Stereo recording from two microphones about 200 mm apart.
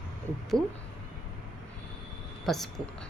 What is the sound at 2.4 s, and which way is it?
Speech, centre (ahead or behind).